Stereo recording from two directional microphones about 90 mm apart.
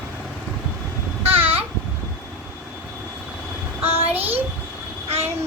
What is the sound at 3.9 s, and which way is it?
Child singing, 90° right.